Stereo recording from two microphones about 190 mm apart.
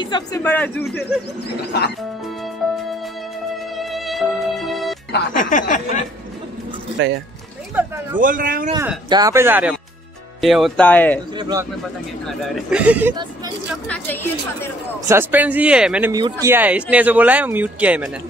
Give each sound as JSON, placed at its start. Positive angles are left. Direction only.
{"t": 0.0, "sound": "speech", "side_deg": 25}
{"t": 0.4, "sound": "a woman's voice", "side_deg": 10}
{"t": 2.0, "sound": "music", "side_deg": 0}
{"t": 5.1, "sound": "speech", "side_deg": 45}
{"t": 7.0, "sound": "speech", "side_deg": -70}
{"t": 7.7, "sound": "a man's voice", "side_deg": -10}
{"t": 8.2, "sound": "a man's voice", "side_deg": -45}
{"t": 8.7, "sound": "a man's voice", "side_deg": -20}
{"t": 11.3, "sound": "speech", "side_deg": -20}
{"t": 12.5, "sound": "a man's voice", "side_deg": -5}
{"t": 13.1, "sound": "speech", "side_deg": -20}
{"t": 13.8, "sound": "a woman's voice", "side_deg": 10}
{"t": 15.0, "sound": "a man's voice", "side_deg": -15}
{"t": 16.1, "sound": "a man's voice", "side_deg": -20}